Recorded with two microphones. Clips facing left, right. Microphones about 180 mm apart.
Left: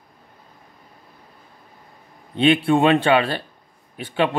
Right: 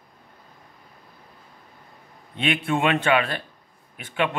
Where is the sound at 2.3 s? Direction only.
30° left (ahead or behind).